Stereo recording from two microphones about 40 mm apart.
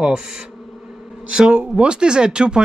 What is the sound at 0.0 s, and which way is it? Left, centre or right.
Speech, right.